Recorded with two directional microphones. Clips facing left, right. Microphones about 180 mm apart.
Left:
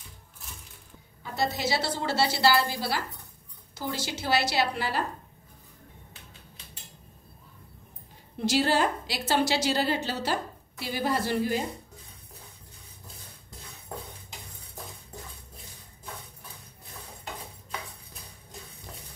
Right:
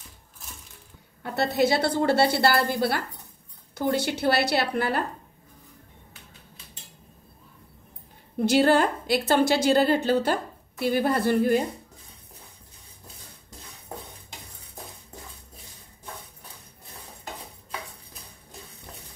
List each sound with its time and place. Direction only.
1.2 s a woman's voice: 65° right (ahead or behind)
8.4 s a woman's voice: 55° right (ahead or behind)